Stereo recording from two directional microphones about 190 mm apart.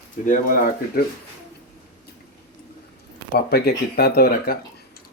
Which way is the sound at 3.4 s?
55° left (ahead or behind).